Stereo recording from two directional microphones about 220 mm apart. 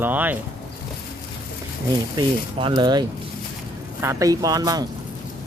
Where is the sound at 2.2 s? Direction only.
20° right (ahead or behind).